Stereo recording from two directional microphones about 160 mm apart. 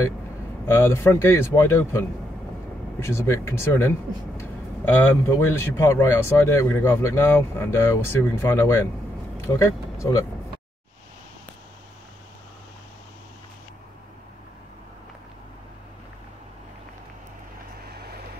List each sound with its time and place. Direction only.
0.7 s speech: 15° left (ahead or behind)
5.4 s speech: 15° left (ahead or behind)
17.9 s vehicle: 75° right (ahead or behind)